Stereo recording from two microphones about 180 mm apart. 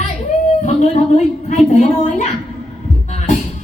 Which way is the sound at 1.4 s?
40° left (ahead or behind).